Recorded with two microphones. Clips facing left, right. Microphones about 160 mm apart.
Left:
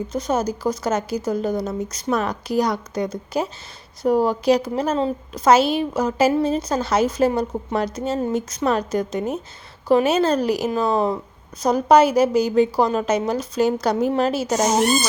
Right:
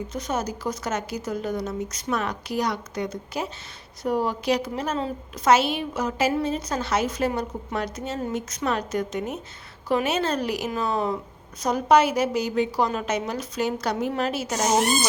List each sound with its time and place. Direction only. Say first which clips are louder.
0.1 s a woman's voice: left 7 dB; 35° left (ahead or behind)